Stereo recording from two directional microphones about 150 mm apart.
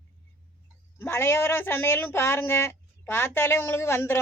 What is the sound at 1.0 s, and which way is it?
Speech, 15° left (ahead or behind).